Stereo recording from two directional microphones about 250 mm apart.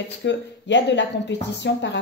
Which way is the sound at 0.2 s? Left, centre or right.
Left.